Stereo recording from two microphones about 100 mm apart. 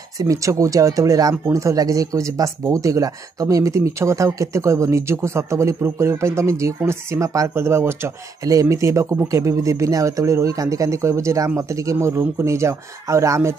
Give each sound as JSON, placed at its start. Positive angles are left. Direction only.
{"t": 0.2, "sound": "speech", "side_deg": -35}